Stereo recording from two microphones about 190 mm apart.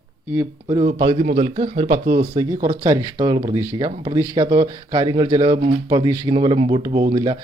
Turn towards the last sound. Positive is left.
turn(degrees=-20)  # may be behind; listen again after turning